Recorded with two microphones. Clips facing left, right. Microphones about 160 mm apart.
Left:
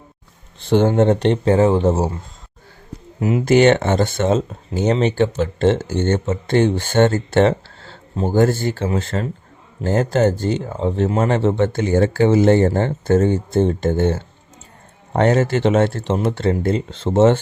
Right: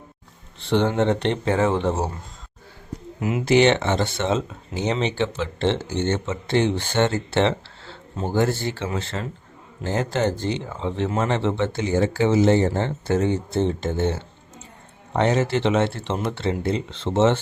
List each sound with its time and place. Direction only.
0.7 s speech: 45° left (ahead or behind)
3.2 s speech: 35° left (ahead or behind)